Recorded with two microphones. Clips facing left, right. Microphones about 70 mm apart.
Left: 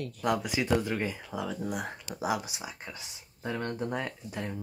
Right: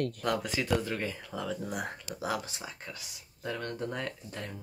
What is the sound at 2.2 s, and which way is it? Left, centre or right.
Speech, centre.